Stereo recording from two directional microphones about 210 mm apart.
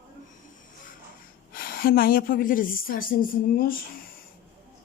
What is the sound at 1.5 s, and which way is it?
A woman's voice, 45° left (ahead or behind).